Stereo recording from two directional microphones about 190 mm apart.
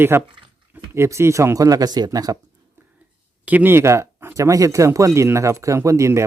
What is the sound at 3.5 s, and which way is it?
Speech, 10° right (ahead or behind).